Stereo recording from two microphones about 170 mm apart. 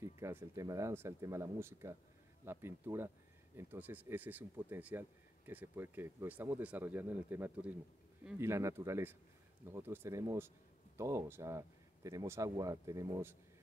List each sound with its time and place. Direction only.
0.2 s speech: 15° right (ahead or behind)